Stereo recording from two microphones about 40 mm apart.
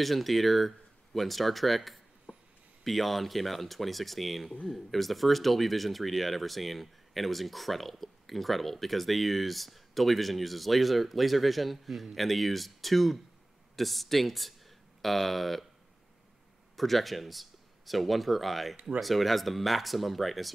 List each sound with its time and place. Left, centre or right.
0.0 s speech: centre
2.3 s a sound: right
2.8 s speech: centre
16.7 s speech: centre